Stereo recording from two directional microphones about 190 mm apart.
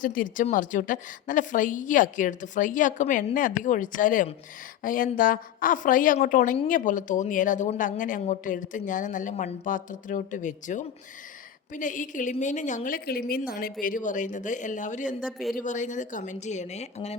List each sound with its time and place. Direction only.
0.0 s a woman's voice: 45° left (ahead or behind)
15.3 s speech: centre (ahead or behind)
15.5 s a woman's voice: 40° left (ahead or behind)